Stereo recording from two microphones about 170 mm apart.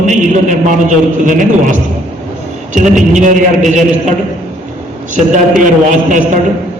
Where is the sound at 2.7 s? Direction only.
50° right (ahead or behind).